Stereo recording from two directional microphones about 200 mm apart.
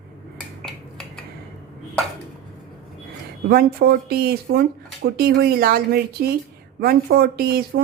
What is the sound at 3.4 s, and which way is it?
Speech, 50° right (ahead or behind).